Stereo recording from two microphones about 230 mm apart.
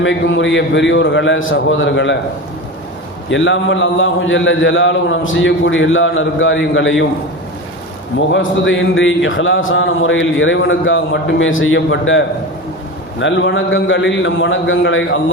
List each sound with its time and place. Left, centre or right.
0.0 s a man's voice: left
3.2 s a man's voice: left
8.3 s a man's voice: left